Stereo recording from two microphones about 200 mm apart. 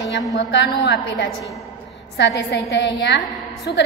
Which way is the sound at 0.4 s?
60° left (ahead or behind).